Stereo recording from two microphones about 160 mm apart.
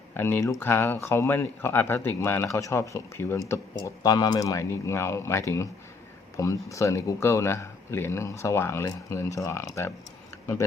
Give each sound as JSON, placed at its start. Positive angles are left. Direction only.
{"t": 0.2, "sound": "speech", "side_deg": 15}